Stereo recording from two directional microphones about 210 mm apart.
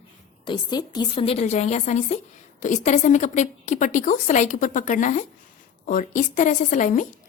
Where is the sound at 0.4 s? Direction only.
20° left (ahead or behind).